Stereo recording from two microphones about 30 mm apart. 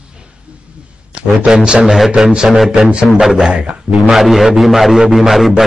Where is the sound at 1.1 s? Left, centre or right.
Right.